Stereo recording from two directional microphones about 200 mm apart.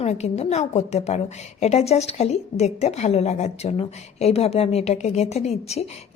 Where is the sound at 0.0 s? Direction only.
35° left (ahead or behind).